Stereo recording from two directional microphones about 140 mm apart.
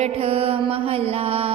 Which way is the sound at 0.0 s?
45° right (ahead or behind).